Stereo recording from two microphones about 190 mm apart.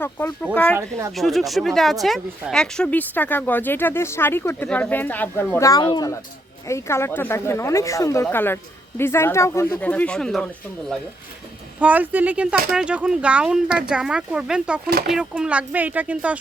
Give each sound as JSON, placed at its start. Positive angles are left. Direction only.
{"t": 0.0, "sound": "speech", "side_deg": 10}
{"t": 0.7, "sound": "speech", "side_deg": -15}
{"t": 1.1, "sound": "speech", "side_deg": 0}
{"t": 11.8, "sound": "speech", "side_deg": -10}
{"t": 14.8, "sound": "speech", "side_deg": -55}
{"t": 15.1, "sound": "speech", "side_deg": -5}